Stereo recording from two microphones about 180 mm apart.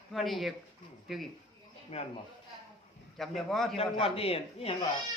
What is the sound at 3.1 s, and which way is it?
Speech, centre (ahead or behind).